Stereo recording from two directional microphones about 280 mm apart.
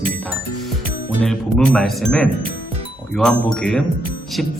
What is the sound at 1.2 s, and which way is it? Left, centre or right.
Speech, centre.